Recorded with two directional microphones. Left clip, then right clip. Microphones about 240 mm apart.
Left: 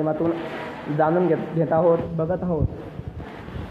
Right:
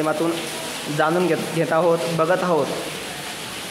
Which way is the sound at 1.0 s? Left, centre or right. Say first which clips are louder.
Even; right.